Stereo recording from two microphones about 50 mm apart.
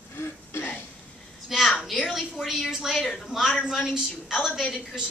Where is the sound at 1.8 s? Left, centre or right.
Centre.